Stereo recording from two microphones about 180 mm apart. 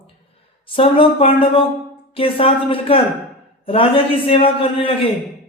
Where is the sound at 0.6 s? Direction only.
30° left (ahead or behind).